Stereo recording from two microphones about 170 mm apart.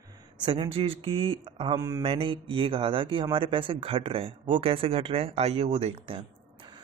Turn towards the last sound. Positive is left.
turn(degrees=-35)  # may be behind; listen again after turning